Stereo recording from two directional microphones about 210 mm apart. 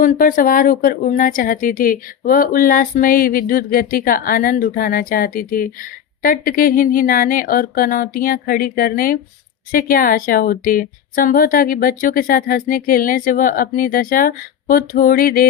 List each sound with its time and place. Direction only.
0.0 s a woman's voice: 40° left (ahead or behind)